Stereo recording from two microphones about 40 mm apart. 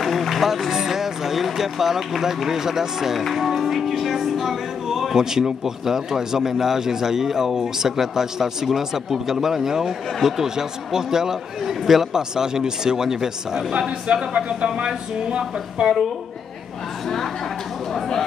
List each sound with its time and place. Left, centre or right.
0.0 s music: centre
0.7 s speech: centre
5.1 s speech: centre
13.7 s a sound: right
17.9 s chatter: centre